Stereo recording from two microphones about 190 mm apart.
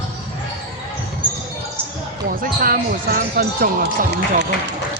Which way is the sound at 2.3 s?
50° right (ahead or behind).